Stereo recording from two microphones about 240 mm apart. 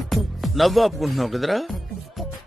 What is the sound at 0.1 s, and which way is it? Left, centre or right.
Speech, centre.